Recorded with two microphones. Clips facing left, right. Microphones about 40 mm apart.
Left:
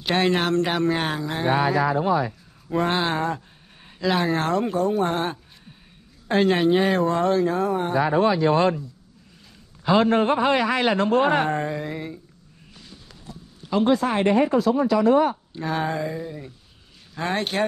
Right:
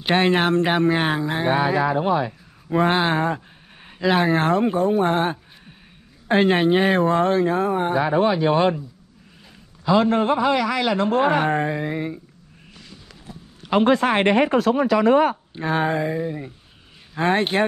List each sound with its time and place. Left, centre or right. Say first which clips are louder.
0.0 s speech: right 3 dB; right
1.8 s speech: right 1 dB; right
2.7 s speech: right 4 dB; right
7.9 s speech: left 1 dB; right
9.8 s a man's voice: right 1 dB; left
11.4 s speech: right 3 dB; right
13.7 s speech: right 3 dB; right
15.5 s speech: right 4 dB; right